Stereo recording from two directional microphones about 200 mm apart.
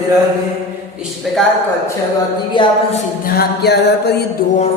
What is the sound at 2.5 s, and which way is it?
Speech, 25° left (ahead or behind).